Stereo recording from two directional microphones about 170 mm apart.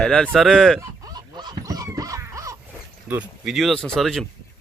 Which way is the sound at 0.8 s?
20° right (ahead or behind).